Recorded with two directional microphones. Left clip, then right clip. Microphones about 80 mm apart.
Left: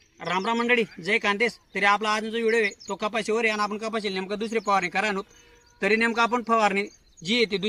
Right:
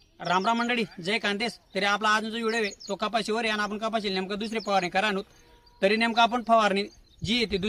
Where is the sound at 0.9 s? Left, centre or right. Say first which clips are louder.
Left 4 dB; right.